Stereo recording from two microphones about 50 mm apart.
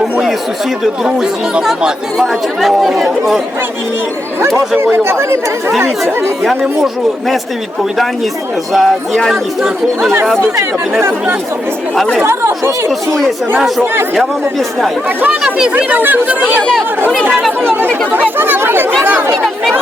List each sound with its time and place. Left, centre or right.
0.0 s chatter: centre
1.0 s a man's voice: centre
4.4 s speech: right
6.4 s a man's voice: centre
8.7 s a man's voice: centre
9.3 s speech: centre
12.2 s speech: right
12.9 s a man's voice: centre
15.4 s speech: centre
16.0 s speech: right
18.3 s speech: right